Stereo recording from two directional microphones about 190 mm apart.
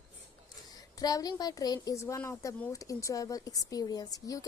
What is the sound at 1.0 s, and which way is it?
A woman's voice, 20° left (ahead or behind).